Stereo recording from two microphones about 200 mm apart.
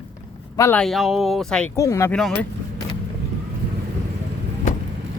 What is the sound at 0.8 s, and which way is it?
Speech, centre (ahead or behind).